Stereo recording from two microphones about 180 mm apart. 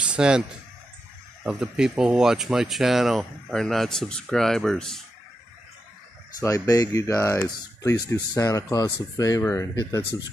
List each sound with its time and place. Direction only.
0.0 s speech: 5° right (ahead or behind)
6.4 s speech: 20° left (ahead or behind)